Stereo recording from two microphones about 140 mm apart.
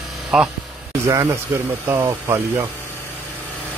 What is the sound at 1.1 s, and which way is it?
Speech, 25° right (ahead or behind).